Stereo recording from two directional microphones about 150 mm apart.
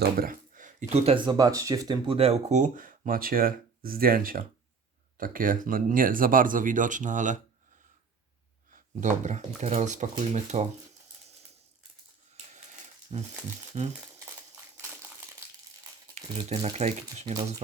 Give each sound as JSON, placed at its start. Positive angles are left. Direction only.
{"t": 0.2, "sound": "speech", "side_deg": -65}
{"t": 2.1, "sound": "speech", "side_deg": -45}
{"t": 8.7, "sound": "speech", "side_deg": -55}
{"t": 13.1, "sound": "speech", "side_deg": -45}
{"t": 16.2, "sound": "a sound", "side_deg": -45}
{"t": 16.5, "sound": "speech", "side_deg": -45}